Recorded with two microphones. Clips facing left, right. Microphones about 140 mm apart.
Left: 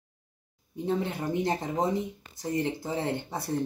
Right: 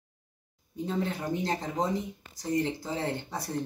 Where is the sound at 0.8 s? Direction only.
20° left (ahead or behind).